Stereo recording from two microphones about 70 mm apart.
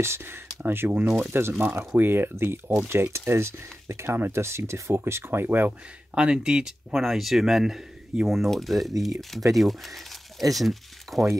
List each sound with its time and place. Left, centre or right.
0.0 s speech: right
6.1 s speech: centre